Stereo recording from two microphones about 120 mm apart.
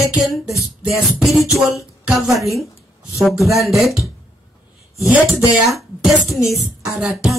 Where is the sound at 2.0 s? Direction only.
5° right (ahead or behind).